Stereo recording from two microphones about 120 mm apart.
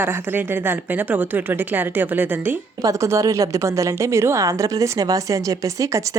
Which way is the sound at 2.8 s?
25° right (ahead or behind).